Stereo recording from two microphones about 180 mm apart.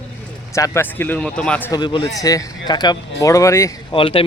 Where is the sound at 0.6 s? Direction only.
15° left (ahead or behind).